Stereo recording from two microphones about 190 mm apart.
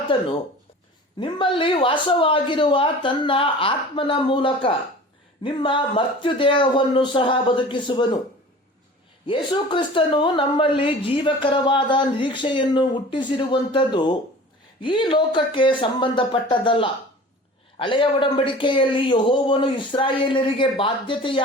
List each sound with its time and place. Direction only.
1.2 s speech: 25° left (ahead or behind)
9.2 s speech: 25° left (ahead or behind)